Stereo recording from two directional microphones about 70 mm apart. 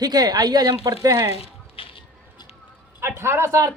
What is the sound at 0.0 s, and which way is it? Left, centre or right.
A woman's voice, right.